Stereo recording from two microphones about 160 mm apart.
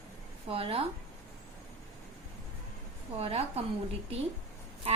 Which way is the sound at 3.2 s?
40° right (ahead or behind).